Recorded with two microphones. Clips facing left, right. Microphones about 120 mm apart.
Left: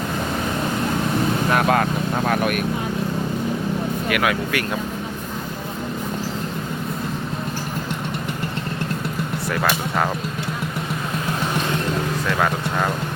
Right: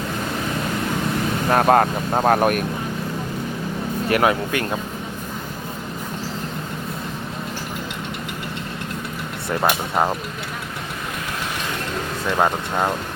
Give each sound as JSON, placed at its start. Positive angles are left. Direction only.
{"t": 1.5, "sound": "speech", "side_deg": -40}
{"t": 4.1, "sound": "speech", "side_deg": -30}